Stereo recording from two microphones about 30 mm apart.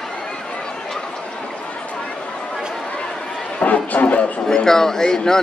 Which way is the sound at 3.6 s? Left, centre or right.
Left.